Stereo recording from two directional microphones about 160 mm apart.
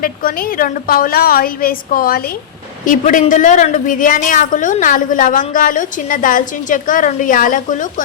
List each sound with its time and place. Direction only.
0.0 s a woman's voice: 60° left (ahead or behind)
2.8 s a woman's voice: 55° left (ahead or behind)